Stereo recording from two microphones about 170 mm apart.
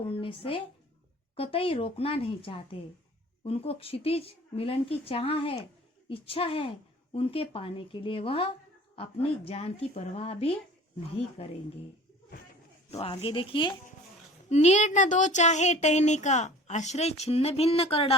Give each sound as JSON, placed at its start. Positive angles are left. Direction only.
{"t": 0.1, "sound": "a woman's voice", "side_deg": 30}
{"t": 13.0, "sound": "a woman's voice", "side_deg": 30}
{"t": 14.5, "sound": "speech", "side_deg": 40}